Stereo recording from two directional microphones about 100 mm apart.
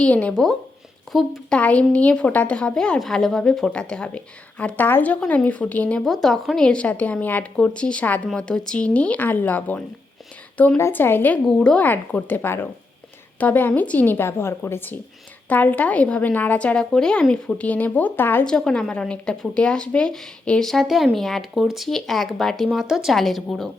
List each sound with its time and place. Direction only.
0.0 s a woman's voice: 10° left (ahead or behind)
1.5 s a woman's voice: 15° left (ahead or behind)
11.4 s a woman's voice: 10° left (ahead or behind)
18.4 s speech: 5° left (ahead or behind)